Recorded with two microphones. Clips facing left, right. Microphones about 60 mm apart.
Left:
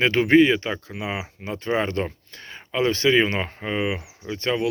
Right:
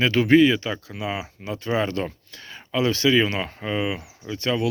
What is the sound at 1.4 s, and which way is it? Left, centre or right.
Speech, left.